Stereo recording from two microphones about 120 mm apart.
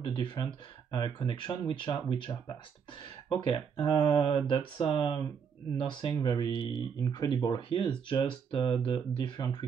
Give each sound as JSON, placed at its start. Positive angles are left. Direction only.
{"t": 0.1, "sound": "speech", "side_deg": 40}